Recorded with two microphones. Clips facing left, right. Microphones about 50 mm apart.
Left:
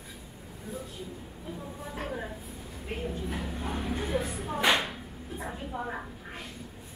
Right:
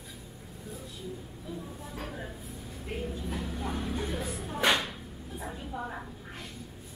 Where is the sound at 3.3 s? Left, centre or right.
Left.